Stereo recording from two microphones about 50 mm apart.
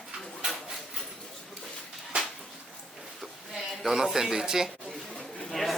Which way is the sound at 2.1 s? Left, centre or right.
Right.